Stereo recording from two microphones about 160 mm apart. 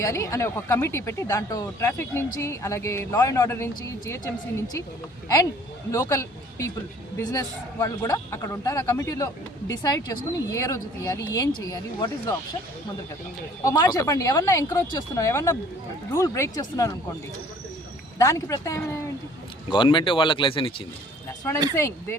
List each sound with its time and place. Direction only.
0.0 s speech: 20° left (ahead or behind)
5.9 s speech: 20° left (ahead or behind)
13.7 s speech: 25° left (ahead or behind)
18.2 s speech: 20° left (ahead or behind); by 20.8 s 35° left (ahead or behind)
21.8 s speech: 15° left (ahead or behind)